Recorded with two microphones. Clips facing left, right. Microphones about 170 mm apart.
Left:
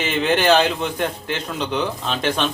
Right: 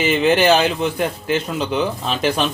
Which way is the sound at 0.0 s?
5° right (ahead or behind).